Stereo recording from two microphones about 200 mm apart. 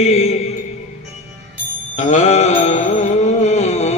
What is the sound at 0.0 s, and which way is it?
Speech, 35° left (ahead or behind).